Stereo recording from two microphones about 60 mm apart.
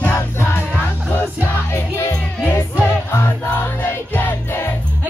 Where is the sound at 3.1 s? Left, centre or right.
Left.